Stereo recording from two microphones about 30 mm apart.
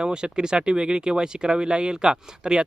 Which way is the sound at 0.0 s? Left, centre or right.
Right.